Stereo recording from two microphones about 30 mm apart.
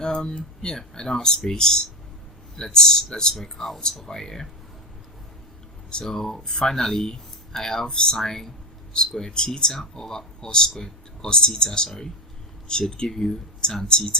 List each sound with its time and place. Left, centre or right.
0.0 s speech: left
3.4 s speech: centre
5.9 s speech: left
13.1 s speech: centre
13.8 s speech: left